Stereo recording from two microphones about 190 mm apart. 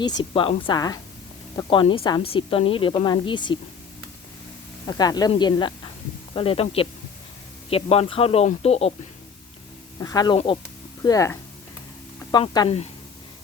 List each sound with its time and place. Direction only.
0.0 s a woman's voice: 25° left (ahead or behind)
4.9 s a woman's voice: 20° left (ahead or behind)
10.0 s a woman's voice: 20° left (ahead or behind)